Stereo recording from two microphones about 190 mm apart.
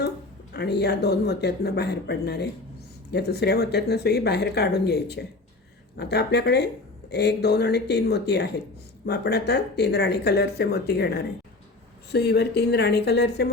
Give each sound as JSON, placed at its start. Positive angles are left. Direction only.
{"t": 0.5, "sound": "speech", "side_deg": 60}